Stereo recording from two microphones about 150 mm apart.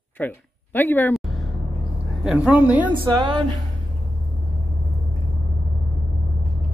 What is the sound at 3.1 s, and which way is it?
Speech, 30° right (ahead or behind).